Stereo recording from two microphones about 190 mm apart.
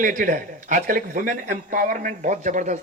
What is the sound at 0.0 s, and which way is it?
A man's voice, 45° right (ahead or behind).